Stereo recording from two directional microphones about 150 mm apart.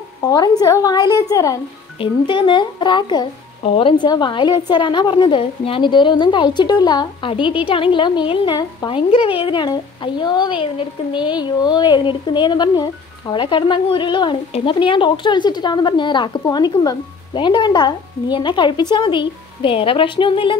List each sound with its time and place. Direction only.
0.2 s a woman's voice: 25° left (ahead or behind)
2.0 s speech: 30° left (ahead or behind)